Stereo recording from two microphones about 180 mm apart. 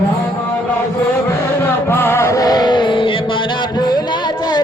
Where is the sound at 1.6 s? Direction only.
15° left (ahead or behind).